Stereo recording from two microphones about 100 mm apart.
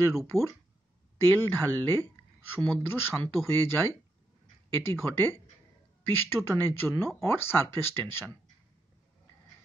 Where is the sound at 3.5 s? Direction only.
25° left (ahead or behind).